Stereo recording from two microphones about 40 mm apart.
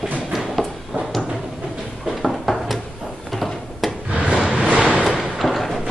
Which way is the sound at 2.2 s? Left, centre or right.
Centre.